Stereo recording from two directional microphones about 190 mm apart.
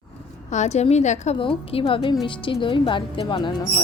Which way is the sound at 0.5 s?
35° left (ahead or behind).